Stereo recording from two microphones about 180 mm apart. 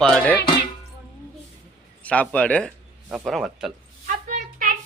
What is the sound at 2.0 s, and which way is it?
Speech, 10° left (ahead or behind).